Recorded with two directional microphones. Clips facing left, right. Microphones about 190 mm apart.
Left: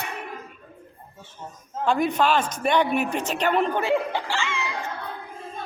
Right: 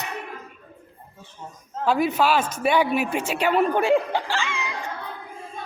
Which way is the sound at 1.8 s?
5° right (ahead or behind).